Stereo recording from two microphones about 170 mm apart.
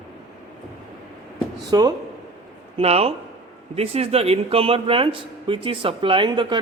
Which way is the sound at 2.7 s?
35° right (ahead or behind).